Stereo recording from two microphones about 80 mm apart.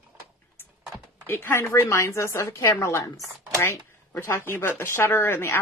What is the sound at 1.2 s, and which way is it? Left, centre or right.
Speech, left.